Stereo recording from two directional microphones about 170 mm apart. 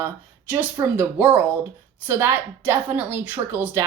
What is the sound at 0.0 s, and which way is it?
A woman's voice, 15° right (ahead or behind).